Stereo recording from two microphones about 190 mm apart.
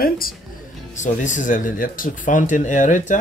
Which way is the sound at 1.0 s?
40° left (ahead or behind).